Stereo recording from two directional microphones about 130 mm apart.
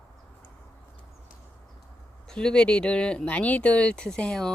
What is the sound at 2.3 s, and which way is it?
Speech, 5° left (ahead or behind).